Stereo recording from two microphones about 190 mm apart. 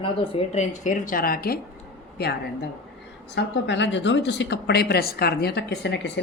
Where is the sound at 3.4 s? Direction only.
70° left (ahead or behind).